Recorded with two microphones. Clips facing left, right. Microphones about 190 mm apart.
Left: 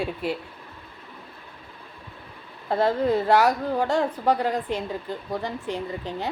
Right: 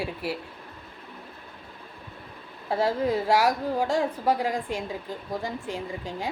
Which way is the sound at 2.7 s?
10° right (ahead or behind).